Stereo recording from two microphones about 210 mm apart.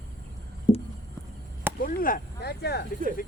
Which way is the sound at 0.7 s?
25° left (ahead or behind).